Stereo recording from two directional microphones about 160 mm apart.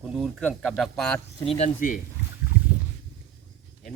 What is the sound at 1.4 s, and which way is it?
Speech, 40° left (ahead or behind).